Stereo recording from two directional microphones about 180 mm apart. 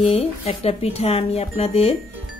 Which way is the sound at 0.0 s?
30° left (ahead or behind).